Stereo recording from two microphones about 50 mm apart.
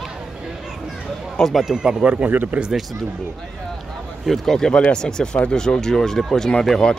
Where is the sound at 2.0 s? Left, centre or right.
Right.